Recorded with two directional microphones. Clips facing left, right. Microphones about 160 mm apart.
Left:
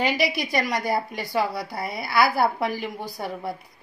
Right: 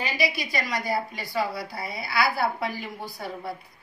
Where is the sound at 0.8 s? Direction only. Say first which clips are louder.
Left 3 dB; 55° left (ahead or behind).